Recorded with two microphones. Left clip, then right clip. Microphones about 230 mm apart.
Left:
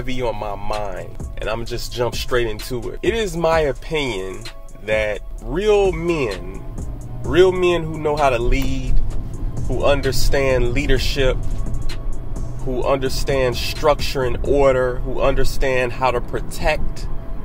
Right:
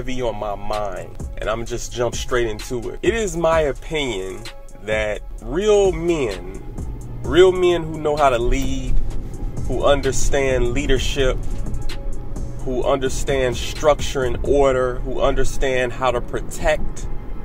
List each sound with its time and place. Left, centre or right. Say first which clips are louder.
0.0 s speech: even; centre
10.3 s speech: left 2 dB; centre
12.7 s speech: even; centre